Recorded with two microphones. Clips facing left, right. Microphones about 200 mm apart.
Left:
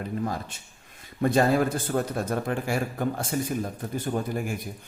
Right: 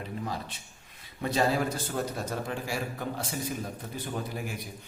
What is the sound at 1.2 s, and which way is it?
A man's voice, 50° left (ahead or behind).